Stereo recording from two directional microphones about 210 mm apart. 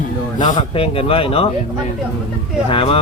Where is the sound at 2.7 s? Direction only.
25° left (ahead or behind).